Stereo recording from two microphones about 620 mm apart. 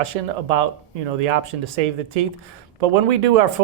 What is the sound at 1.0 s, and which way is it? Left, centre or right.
Speech, right.